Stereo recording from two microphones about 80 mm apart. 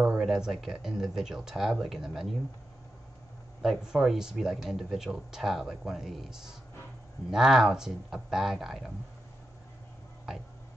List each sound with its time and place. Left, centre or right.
0.2 s speech: centre
3.6 s speech: centre